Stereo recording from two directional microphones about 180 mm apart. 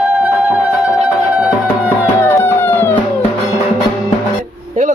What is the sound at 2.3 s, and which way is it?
Music, 15° left (ahead or behind).